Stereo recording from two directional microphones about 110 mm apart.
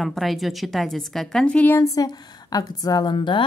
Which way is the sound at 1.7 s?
30° left (ahead or behind).